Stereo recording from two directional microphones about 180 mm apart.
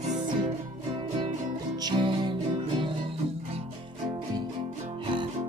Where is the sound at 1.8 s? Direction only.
25° right (ahead or behind).